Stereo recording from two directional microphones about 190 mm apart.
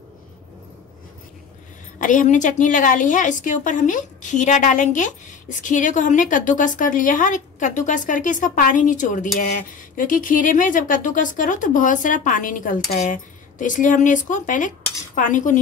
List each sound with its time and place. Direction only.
2.0 s a woman's voice: 45° left (ahead or behind)